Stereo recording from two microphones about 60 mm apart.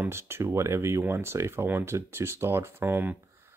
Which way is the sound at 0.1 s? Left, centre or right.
Right.